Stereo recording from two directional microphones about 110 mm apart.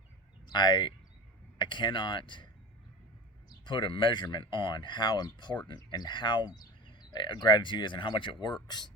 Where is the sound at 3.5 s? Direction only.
45° left (ahead or behind).